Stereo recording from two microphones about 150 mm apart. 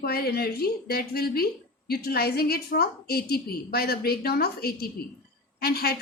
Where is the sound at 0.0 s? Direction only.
90° left.